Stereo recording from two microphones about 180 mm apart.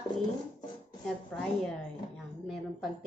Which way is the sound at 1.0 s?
5° left (ahead or behind).